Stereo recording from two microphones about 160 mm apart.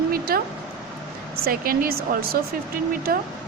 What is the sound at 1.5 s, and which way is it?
Speech, 65° right (ahead or behind).